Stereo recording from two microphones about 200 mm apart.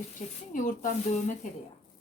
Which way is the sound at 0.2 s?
35° left (ahead or behind).